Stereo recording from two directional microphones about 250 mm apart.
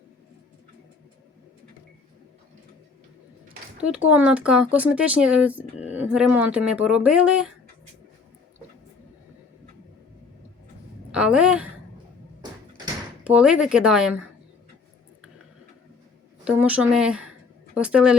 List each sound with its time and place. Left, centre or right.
3.8 s speech: centre
11.1 s a sound: centre
12.4 s door: centre
13.2 s speech: centre
16.4 s speech: centre